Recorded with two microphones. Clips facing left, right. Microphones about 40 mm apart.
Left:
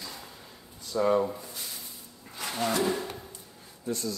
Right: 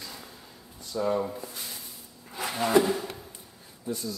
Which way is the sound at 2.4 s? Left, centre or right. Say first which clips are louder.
Right 5 dB; centre.